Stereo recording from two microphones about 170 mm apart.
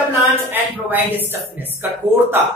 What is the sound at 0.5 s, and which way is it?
Speech, 10° right (ahead or behind).